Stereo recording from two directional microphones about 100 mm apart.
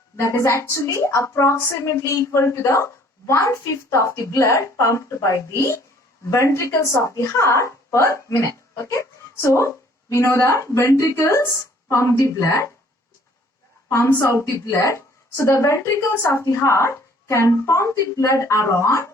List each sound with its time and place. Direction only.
0.2 s a woman's voice: 30° left (ahead or behind)
13.9 s a woman's voice: 30° left (ahead or behind)